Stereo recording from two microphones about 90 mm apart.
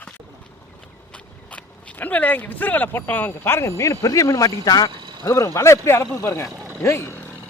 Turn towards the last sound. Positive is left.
turn(degrees=30)  # may be behind; listen again after turning